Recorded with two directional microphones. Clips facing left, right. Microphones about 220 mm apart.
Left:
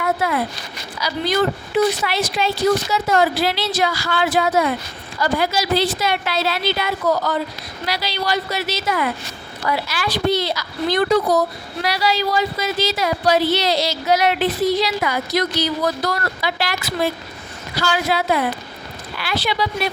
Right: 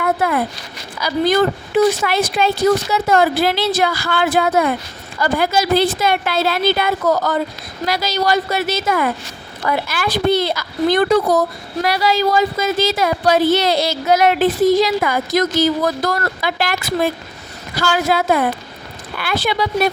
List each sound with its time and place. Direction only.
0.0 s a woman's voice: 50° right (ahead or behind)